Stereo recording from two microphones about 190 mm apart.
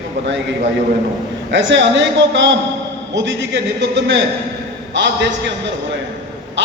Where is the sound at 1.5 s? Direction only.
70° right (ahead or behind).